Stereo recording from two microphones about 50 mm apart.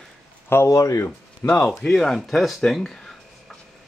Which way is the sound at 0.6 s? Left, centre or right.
Left.